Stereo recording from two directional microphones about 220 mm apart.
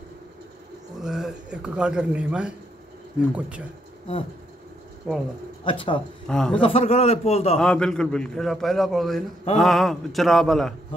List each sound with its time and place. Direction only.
1.0 s a man's voice: centre (ahead or behind)
5.1 s a man's voice: centre (ahead or behind)
5.7 s a man's voice: 25° left (ahead or behind)
6.2 s a man's voice: 5° left (ahead or behind)
6.6 s a man's voice: 25° left (ahead or behind)
7.5 s a man's voice: 5° left (ahead or behind)